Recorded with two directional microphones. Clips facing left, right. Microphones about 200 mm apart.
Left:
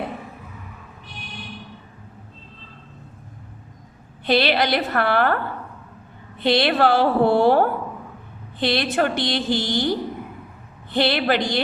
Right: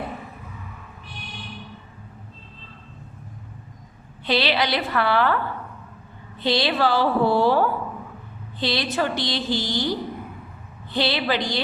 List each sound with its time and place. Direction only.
4.3 s a woman's voice: 50° left (ahead or behind)
10.9 s a woman's voice: 55° left (ahead or behind)